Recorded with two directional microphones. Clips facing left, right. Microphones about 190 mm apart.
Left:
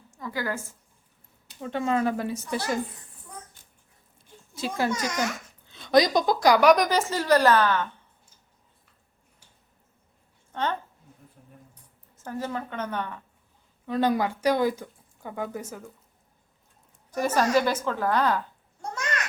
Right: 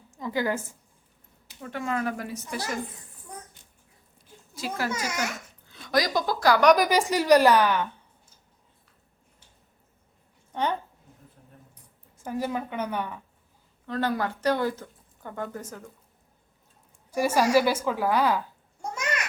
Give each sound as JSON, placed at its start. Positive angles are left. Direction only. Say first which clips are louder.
{"t": 0.2, "sound": "a woman's voice", "louder": "right 4 dB", "side_deg": -20}
{"t": 1.6, "sound": "a woman's voice", "louder": "left 4 dB", "side_deg": 25}
{"t": 4.5, "sound": "a child's voice", "louder": "left 3 dB", "side_deg": 25}
{"t": 4.9, "sound": "a woman's voice", "louder": "left 3 dB", "side_deg": -5}
{"t": 5.6, "sound": "a woman's voice", "louder": "left 6 dB", "side_deg": 20}
{"t": 6.7, "sound": "a woman's voice", "louder": "even", "side_deg": -5}
{"t": 10.5, "sound": "a woman's voice", "louder": "right 1 dB", "side_deg": -15}
{"t": 12.1, "sound": "a woman's voice", "louder": "right 2 dB", "side_deg": -10}
{"t": 13.8, "sound": "speech", "louder": "left 3 dB", "side_deg": 15}
{"t": 17.1, "sound": "a woman's voice", "louder": "right 1 dB", "side_deg": -10}